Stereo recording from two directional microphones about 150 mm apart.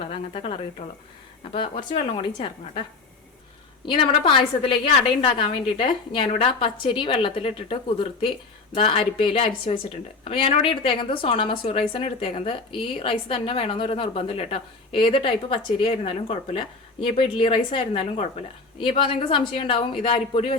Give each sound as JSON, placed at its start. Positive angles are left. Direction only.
{"t": 0.0, "sound": "a woman's voice", "side_deg": 40}
{"t": 3.8, "sound": "a woman's voice", "side_deg": 35}